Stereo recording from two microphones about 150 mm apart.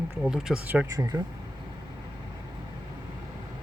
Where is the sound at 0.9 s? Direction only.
25° right (ahead or behind).